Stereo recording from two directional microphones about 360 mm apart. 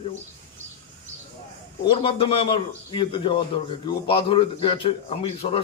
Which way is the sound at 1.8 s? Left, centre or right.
Centre.